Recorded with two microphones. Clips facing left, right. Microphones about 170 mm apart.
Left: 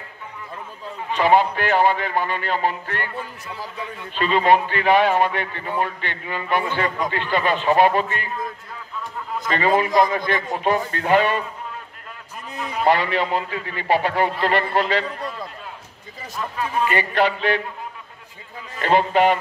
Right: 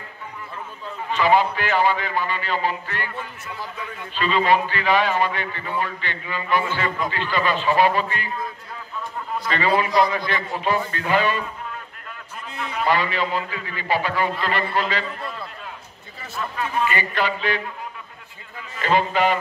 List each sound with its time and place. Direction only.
1.1 s a man's voice: 55° left (ahead or behind)
4.2 s a man's voice: 55° left (ahead or behind)
9.5 s a man's voice: 45° left (ahead or behind)
12.5 s a sound: 40° left (ahead or behind)
12.8 s a man's voice: 60° left (ahead or behind)
16.9 s a man's voice: 65° left (ahead or behind)
18.8 s a man's voice: 60° left (ahead or behind)